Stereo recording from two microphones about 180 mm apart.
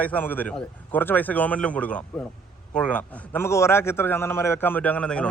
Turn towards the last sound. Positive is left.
turn(degrees=5)  # may be behind; listen again after turning